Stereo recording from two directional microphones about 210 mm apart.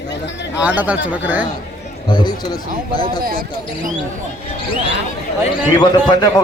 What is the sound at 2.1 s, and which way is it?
Speech, 20° left (ahead or behind).